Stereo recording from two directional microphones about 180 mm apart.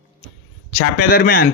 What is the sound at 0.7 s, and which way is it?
Speech, 50° left (ahead or behind).